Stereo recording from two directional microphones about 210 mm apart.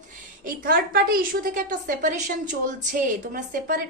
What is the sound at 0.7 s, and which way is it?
A child's voice, 45° right (ahead or behind).